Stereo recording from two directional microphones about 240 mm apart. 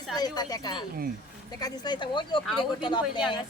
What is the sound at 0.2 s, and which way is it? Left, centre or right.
A woman's voice, centre.